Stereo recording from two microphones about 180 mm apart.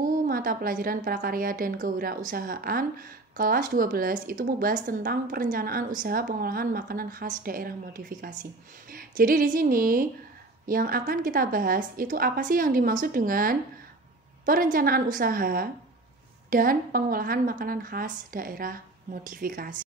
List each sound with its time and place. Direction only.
0.0 s a woman's voice: 50° right (ahead or behind)